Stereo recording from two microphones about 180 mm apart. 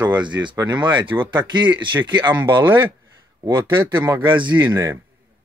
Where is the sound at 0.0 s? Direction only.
25° right (ahead or behind).